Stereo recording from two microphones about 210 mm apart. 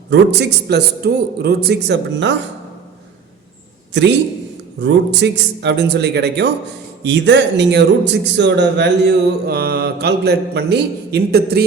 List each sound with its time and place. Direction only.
0.1 s a man's voice: 55° right (ahead or behind)
3.9 s a man's voice: 55° right (ahead or behind)